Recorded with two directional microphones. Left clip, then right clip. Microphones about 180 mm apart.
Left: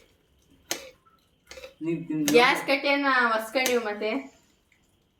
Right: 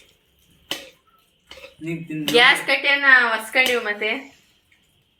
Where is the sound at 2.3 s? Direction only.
Centre (ahead or behind).